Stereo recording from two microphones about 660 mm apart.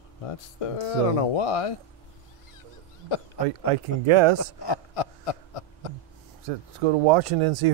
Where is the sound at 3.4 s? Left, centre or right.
Right.